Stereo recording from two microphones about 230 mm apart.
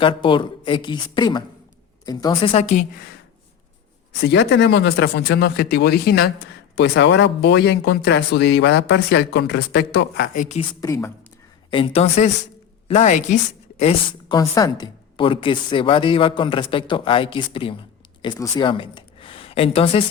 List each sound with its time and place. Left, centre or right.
0.0 s a woman's voice: left
4.2 s speech: left
10.6 s a woman's voice: centre
11.7 s a woman's voice: left